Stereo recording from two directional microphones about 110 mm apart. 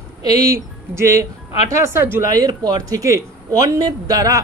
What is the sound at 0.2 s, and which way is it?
Speech, 30° right (ahead or behind).